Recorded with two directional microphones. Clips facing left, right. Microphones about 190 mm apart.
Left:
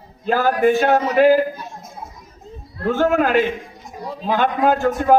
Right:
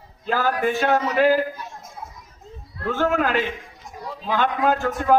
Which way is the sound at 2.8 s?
50° left (ahead or behind).